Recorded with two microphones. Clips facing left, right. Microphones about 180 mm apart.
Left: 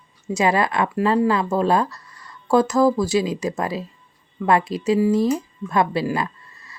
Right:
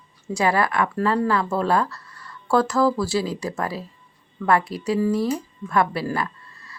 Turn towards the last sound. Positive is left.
turn(degrees=20)  # may be behind; listen again after turning